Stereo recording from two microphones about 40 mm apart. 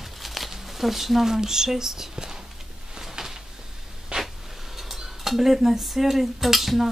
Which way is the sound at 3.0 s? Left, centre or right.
Centre.